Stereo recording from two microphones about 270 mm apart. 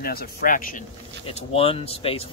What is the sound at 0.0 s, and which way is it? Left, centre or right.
Speech, left.